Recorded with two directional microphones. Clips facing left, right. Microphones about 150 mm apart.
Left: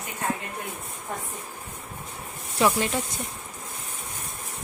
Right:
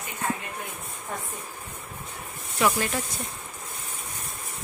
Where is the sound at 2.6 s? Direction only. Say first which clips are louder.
Left 2 dB; 30° left (ahead or behind).